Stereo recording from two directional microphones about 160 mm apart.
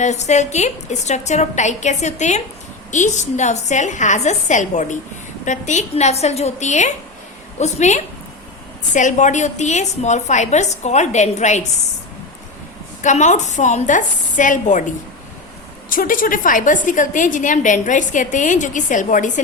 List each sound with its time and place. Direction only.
0.0 s a woman's voice: 45° left (ahead or behind)
13.0 s a woman's voice: 50° left (ahead or behind)
15.9 s a woman's voice: 60° left (ahead or behind)